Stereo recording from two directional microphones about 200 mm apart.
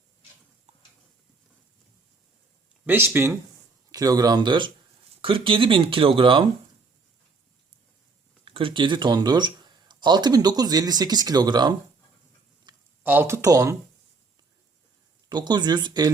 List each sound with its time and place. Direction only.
2.8 s speech: 10° right (ahead or behind); by 6.4 s 25° right (ahead or behind)
8.4 s speech: 25° right (ahead or behind)
12.7 s a sound: 20° right (ahead or behind)
13.0 s speech: 10° right (ahead or behind)
15.3 s speech: 20° right (ahead or behind)